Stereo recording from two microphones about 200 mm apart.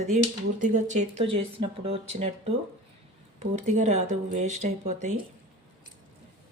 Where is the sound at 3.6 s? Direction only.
35° right (ahead or behind).